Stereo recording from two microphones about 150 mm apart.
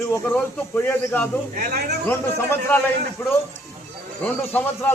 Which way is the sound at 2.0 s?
15° left (ahead or behind).